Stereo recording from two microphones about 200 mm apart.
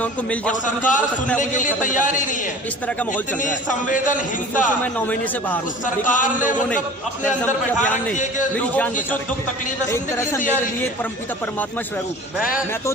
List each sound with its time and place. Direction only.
0.0 s a man's voice: 5° left (ahead or behind)
1.4 s a man's voice: 40° left (ahead or behind)
3.4 s a man's voice: 40° left (ahead or behind)
5.8 s a man's voice: 40° left (ahead or behind)
7.4 s a man's voice: 10° left (ahead or behind)
9.9 s a man's voice: 10° left (ahead or behind)